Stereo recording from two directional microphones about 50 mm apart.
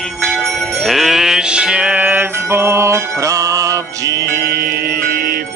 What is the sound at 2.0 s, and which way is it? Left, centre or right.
Music, right.